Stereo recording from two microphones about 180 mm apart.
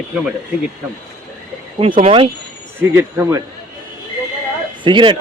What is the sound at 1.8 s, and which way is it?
Speech, 30° right (ahead or behind).